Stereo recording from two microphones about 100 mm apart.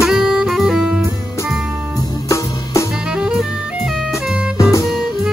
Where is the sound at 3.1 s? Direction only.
5° right (ahead or behind).